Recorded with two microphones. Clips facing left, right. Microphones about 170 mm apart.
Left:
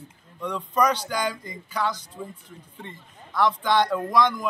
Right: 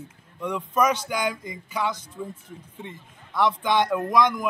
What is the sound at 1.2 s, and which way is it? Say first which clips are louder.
Speech: right 1 dB; 20° right (ahead or behind).